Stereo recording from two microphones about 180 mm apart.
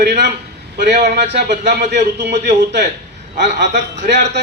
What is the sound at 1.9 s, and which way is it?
A woman's voice, 70° right (ahead or behind).